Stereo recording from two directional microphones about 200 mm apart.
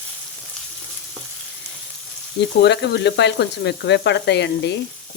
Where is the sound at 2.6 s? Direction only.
55° left (ahead or behind).